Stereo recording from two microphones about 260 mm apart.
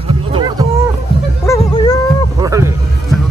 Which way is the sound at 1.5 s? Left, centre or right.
Centre.